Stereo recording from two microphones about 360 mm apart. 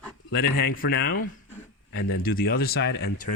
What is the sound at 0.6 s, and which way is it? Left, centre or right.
Speech, left.